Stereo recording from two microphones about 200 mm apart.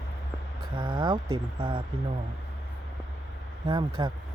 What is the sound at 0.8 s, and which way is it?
Speech, 25° right (ahead or behind).